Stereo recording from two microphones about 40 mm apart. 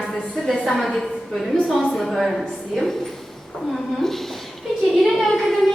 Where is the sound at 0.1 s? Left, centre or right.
Centre.